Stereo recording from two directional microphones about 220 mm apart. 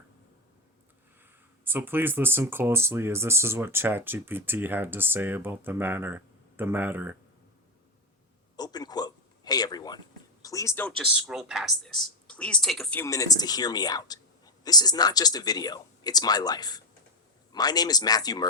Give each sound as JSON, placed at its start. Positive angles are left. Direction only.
{"t": 1.2, "sound": "speech", "side_deg": -10}
{"t": 8.5, "sound": "a sound", "side_deg": 20}
{"t": 10.4, "sound": "speech", "side_deg": 15}